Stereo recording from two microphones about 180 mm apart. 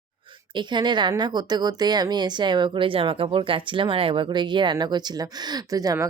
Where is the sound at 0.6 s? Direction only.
25° right (ahead or behind).